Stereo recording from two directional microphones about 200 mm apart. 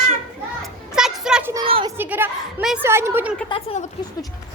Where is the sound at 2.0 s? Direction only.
10° right (ahead or behind).